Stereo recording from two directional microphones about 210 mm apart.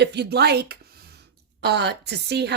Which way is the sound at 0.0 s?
50° right (ahead or behind).